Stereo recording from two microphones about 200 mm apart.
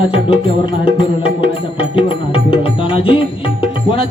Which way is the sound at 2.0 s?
25° left (ahead or behind).